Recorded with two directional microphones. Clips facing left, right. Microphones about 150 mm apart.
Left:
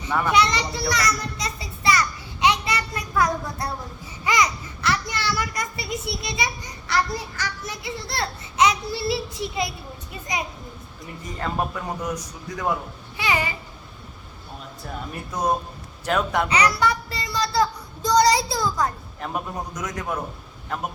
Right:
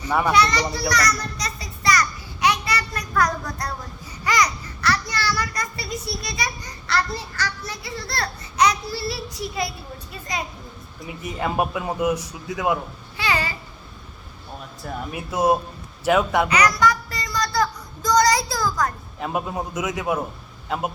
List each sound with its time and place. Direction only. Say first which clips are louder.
0.3 s children playing: right 1 dB; 20° left (ahead or behind)
4.2 s babbling: even; 20° left (ahead or behind)
11.0 s a man's voice: right 4 dB; 10° right (ahead or behind)
13.1 s babbling: even; 20° left (ahead or behind)
15.1 s speech: right 4 dB; 5° right (ahead or behind)
16.5 s child singing: right 2 dB; 30° left (ahead or behind)
19.2 s a man's voice: right 3 dB; 10° right (ahead or behind)